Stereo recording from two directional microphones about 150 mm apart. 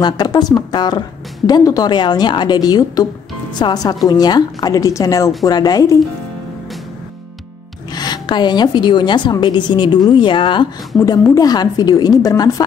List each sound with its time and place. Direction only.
0.0 s a woman's voice: 25° left (ahead or behind)
7.9 s a woman's voice: 30° left (ahead or behind)
11.0 s a woman's voice: 20° left (ahead or behind)